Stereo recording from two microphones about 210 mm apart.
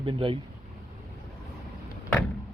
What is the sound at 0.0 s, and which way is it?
Speech, 25° right (ahead or behind).